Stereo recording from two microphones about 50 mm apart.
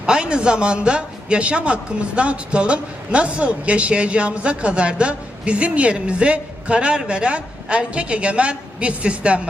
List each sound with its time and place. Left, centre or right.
0.0 s a man's voice: centre